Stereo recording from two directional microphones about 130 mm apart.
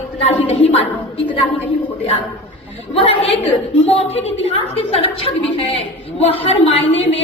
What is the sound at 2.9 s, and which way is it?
A woman's voice, 50° left (ahead or behind).